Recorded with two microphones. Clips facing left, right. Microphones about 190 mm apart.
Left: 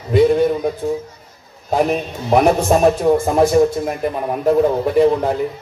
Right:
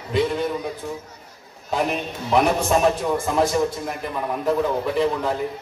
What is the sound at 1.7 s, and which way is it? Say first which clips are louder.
A man's voice: left 6 dB; 45° left (ahead or behind).